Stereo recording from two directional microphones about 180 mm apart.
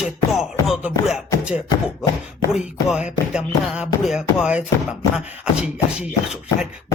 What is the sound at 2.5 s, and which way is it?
Beatboxing, 5° right (ahead or behind).